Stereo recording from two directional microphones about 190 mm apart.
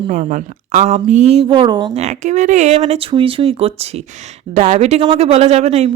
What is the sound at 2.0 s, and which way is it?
Speech, 35° right (ahead or behind).